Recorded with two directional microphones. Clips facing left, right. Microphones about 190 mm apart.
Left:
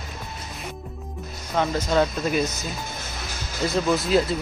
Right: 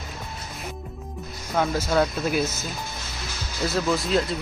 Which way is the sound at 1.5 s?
5° right (ahead or behind).